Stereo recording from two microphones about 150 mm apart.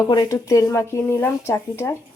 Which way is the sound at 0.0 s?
25° left (ahead or behind).